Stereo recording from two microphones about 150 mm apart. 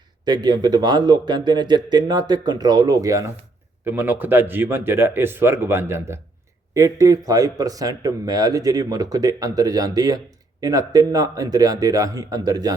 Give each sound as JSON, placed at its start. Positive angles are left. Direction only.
{"t": 0.3, "sound": "a man's voice", "side_deg": -30}